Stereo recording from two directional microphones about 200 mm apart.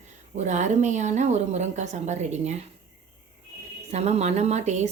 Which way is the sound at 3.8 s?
35° right (ahead or behind).